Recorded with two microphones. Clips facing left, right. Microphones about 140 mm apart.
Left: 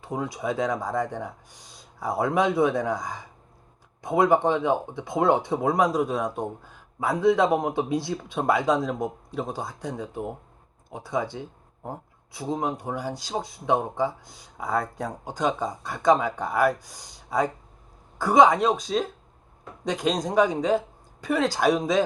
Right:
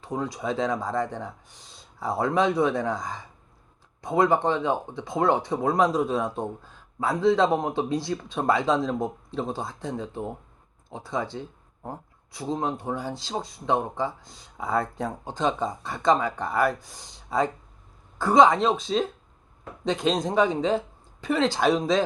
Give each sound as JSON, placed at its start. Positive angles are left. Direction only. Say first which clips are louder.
{"t": 0.0, "sound": "speech", "louder": "even", "side_deg": 20}
{"t": 0.3, "sound": "speech", "louder": "left 1 dB", "side_deg": 10}
{"t": 2.3, "sound": "speech", "louder": "left 1 dB", "side_deg": 15}
{"t": 6.2, "sound": "speech", "louder": "left 1 dB", "side_deg": 15}
{"t": 18.2, "sound": "speech", "louder": "even", "side_deg": 15}
{"t": 18.4, "sound": "speech", "louder": "even", "side_deg": 0}